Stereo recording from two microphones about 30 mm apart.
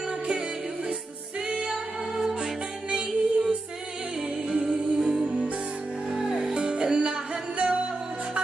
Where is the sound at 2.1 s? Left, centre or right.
Centre.